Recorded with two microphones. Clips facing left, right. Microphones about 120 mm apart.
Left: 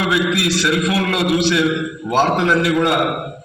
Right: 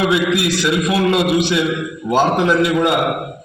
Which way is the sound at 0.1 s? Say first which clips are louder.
Right 1 dB; 20° right (ahead or behind).